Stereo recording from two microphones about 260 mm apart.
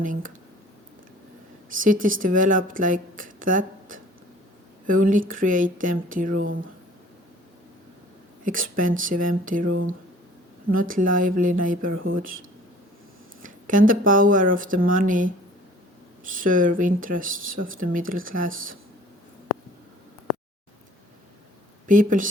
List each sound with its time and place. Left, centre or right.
0.0 s speech: right
1.7 s speech: right
8.4 s speech: right
10.7 s speech: right
13.4 s speech: right
16.3 s speech: right
21.8 s speech: right